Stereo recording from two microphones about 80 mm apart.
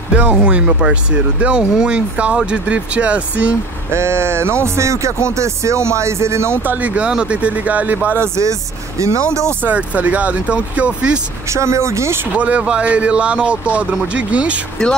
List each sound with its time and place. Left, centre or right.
0.1 s speech: centre
3.9 s music: right
6.6 s speech: right
8.2 s music: right
9.6 s speech: centre
11.4 s music: right
12.4 s speech: centre